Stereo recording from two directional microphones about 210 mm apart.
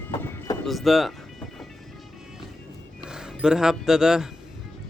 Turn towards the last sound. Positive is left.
turn(degrees=-5)  # may be behind; listen again after turning